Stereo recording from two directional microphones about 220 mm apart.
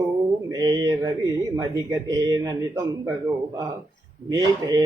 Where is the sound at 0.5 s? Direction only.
15° right (ahead or behind).